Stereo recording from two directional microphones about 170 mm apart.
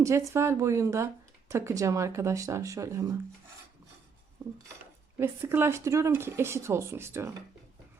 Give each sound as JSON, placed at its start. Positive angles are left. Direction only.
{"t": 0.0, "sound": "speech", "side_deg": -15}
{"t": 4.4, "sound": "dishes", "side_deg": -20}
{"t": 5.1, "sound": "speech", "side_deg": -15}